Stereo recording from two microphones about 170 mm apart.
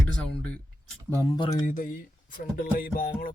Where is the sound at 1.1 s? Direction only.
15° left (ahead or behind).